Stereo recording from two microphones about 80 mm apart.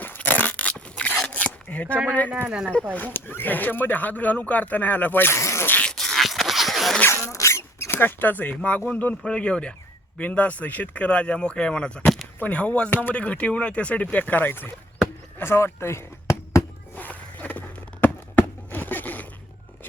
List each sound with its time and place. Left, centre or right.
0.0 s a sound: left
2.9 s speech: left
5.3 s insect: left
5.8 s dog: centre
7.0 s dog: left; by 8.8 s centre
8.9 s speech: centre
15.4 s a sound: left
16.9 s music: left
18.0 s a sound: left